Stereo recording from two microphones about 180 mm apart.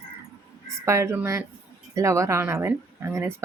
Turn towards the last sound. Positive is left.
turn(degrees=-15)  # may be behind; listen again after turning